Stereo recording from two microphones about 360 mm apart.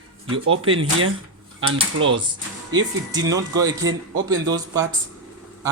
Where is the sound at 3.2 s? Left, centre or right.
Centre.